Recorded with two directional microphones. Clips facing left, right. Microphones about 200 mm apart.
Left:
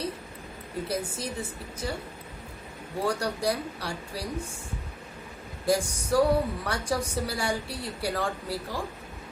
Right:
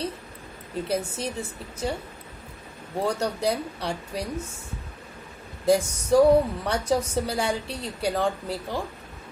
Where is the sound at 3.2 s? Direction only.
25° right (ahead or behind).